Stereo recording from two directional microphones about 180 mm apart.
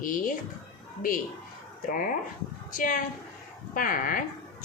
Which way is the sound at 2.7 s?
50° left (ahead or behind).